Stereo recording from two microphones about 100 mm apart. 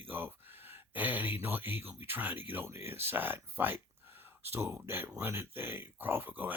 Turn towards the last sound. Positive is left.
turn(degrees=-20)  # may be behind; listen again after turning